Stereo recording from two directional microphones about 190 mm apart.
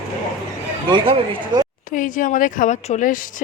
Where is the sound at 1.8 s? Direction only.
45° left (ahead or behind).